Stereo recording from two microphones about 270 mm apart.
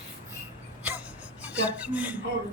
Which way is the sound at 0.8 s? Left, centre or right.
Centre.